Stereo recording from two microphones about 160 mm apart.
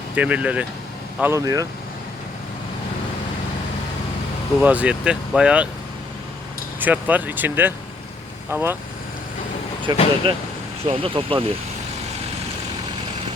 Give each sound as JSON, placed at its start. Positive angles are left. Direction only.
{"t": 0.2, "sound": "speech", "side_deg": -10}
{"t": 4.6, "sound": "speech", "side_deg": -10}
{"t": 6.7, "sound": "speech", "side_deg": -10}
{"t": 9.9, "sound": "speech", "side_deg": -25}